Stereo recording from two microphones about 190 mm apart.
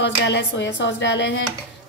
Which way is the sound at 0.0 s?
65° left (ahead or behind).